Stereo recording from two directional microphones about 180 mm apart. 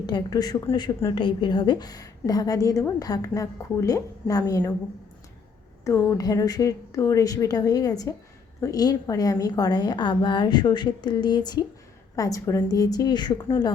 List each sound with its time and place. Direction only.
0.0 s a woman's voice: 25° left (ahead or behind)
5.8 s a woman's voice: 15° left (ahead or behind)